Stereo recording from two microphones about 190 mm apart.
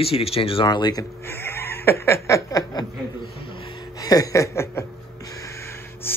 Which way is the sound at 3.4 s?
25° left (ahead or behind).